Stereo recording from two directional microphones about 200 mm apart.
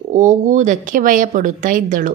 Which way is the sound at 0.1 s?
40° right (ahead or behind).